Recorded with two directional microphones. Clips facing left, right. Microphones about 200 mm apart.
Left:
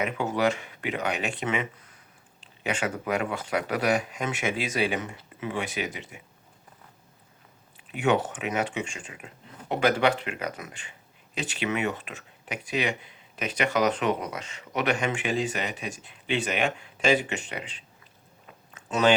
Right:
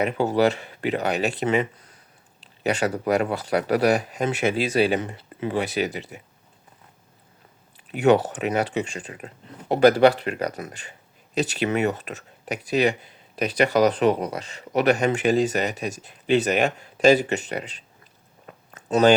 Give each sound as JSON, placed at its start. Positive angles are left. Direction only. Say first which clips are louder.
{"t": 0.0, "sound": "speech", "louder": "right 5 dB", "side_deg": -35}
{"t": 7.9, "sound": "speech", "louder": "right 6 dB", "side_deg": -35}
{"t": 18.7, "sound": "a sound", "louder": "right 5 dB", "side_deg": -40}